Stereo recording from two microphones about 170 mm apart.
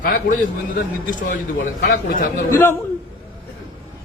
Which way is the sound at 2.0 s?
55° left (ahead or behind).